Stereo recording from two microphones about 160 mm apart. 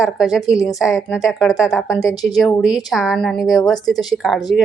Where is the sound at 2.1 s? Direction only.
25° left (ahead or behind).